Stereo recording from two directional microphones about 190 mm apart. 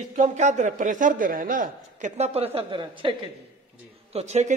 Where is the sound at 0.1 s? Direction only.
40° right (ahead or behind).